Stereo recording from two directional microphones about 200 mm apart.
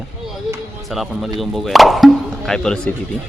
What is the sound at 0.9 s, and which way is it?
Speech, centre (ahead or behind).